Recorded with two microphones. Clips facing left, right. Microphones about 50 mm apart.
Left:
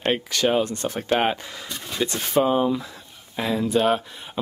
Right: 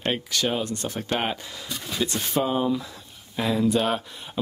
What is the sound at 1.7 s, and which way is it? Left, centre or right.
Speech, centre.